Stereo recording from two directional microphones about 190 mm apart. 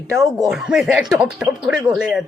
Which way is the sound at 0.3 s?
Centre (ahead or behind).